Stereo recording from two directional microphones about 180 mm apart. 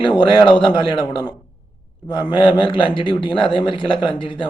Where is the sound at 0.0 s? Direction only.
25° left (ahead or behind).